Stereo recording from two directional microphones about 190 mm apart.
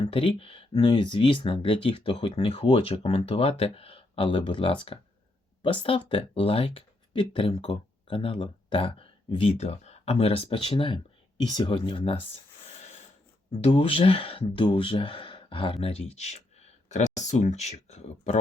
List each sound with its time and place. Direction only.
0.0 s speech: 30° left (ahead or behind)
13.5 s speech: 30° left (ahead or behind)